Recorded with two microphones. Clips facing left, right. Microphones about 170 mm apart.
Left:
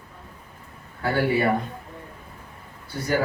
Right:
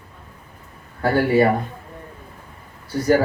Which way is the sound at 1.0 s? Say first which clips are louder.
Right 6 dB; 40° right (ahead or behind).